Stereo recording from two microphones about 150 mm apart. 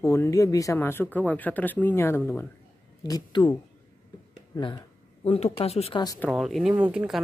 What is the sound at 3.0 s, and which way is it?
Speech, 30° left (ahead or behind).